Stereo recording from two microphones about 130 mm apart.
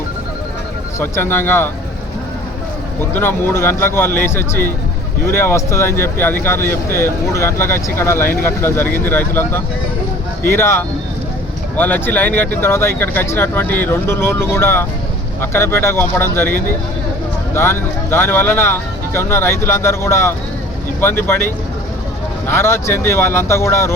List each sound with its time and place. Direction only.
0.9 s speech: 15° left (ahead or behind)
3.1 s speech: 15° left (ahead or behind)